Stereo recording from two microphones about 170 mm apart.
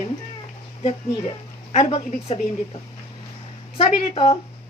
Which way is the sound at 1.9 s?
35° left (ahead or behind).